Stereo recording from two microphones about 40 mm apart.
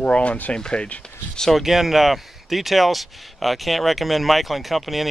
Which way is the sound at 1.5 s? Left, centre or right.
Centre.